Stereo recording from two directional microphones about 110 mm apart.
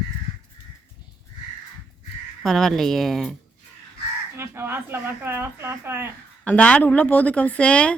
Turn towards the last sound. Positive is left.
turn(degrees=10)  # may be behind; listen again after turning